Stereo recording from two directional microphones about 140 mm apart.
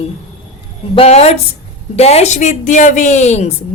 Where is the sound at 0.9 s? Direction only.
50° left (ahead or behind).